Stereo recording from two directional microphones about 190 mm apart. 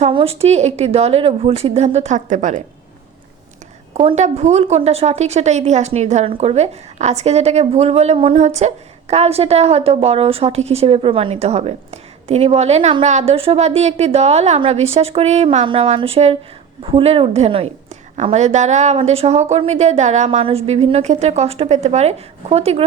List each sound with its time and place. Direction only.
0.0 s a woman's voice: 30° right (ahead or behind)
3.9 s a woman's voice: 35° right (ahead or behind)